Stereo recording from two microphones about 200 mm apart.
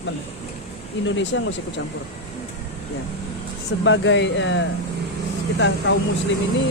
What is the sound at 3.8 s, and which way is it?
Speech, 70° left (ahead or behind).